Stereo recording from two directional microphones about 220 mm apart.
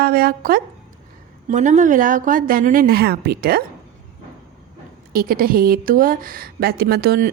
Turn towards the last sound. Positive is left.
turn(degrees=-45)  # may be behind; listen again after turning